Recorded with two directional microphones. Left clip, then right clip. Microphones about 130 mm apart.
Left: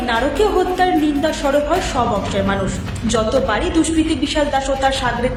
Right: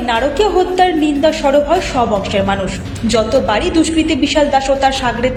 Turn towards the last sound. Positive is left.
turn(degrees=-20)  # may be behind; listen again after turning